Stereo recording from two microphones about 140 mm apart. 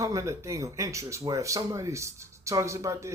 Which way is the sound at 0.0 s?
25° right (ahead or behind).